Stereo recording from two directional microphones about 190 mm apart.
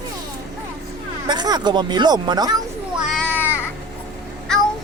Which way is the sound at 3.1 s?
10° left (ahead or behind).